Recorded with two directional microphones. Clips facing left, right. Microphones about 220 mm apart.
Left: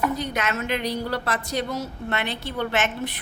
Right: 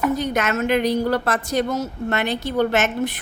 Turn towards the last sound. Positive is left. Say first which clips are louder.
# right 6 dB
turn(degrees=-45)  # may be behind; listen again after turning